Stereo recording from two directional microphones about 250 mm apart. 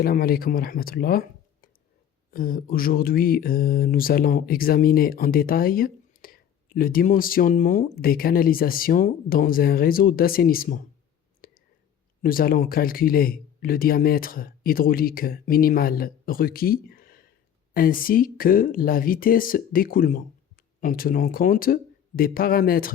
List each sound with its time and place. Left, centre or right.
0.0 s speech: left
2.3 s speech: left
11.4 s whispering: left
12.2 s speech: left